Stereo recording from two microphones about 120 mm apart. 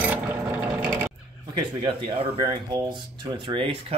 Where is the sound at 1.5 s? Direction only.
40° right (ahead or behind).